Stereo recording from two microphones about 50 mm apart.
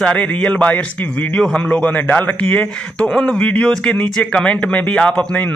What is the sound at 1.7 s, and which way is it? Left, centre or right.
Speech, left.